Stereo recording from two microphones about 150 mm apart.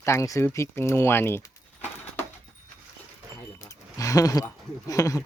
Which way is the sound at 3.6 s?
20° left (ahead or behind).